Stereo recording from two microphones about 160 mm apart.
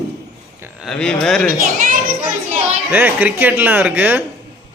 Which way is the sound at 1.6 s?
60° right (ahead or behind).